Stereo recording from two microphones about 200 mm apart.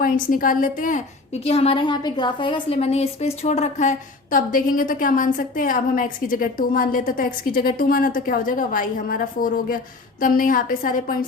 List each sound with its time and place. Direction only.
0.0 s a woman's voice: 45° left (ahead or behind)